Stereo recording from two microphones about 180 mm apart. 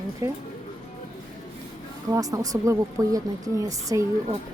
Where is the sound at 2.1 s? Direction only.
20° right (ahead or behind).